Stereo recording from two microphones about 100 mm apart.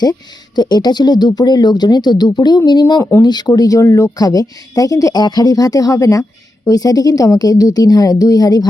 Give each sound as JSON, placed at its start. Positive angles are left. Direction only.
{"t": 0.0, "sound": "speech", "side_deg": 45}
{"t": 3.0, "sound": "speech", "side_deg": 25}
{"t": 3.2, "sound": "speech", "side_deg": 45}